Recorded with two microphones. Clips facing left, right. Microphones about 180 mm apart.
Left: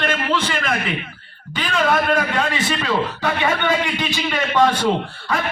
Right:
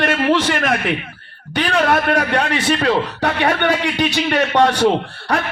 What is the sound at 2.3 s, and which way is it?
A man's voice, 70° right (ahead or behind).